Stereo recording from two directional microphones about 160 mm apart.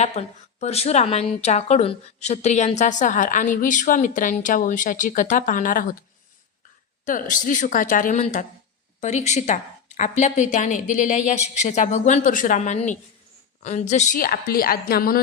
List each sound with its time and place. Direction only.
0.0 s a woman's voice: 45° left (ahead or behind); by 6.0 s 60° left (ahead or behind)
7.0 s a woman's voice: 55° left (ahead or behind)